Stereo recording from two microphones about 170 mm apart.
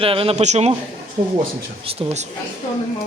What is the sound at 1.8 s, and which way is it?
Speech, 40° right (ahead or behind).